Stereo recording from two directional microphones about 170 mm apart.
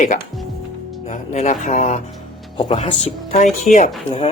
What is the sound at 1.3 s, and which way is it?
Speech, 45° left (ahead or behind).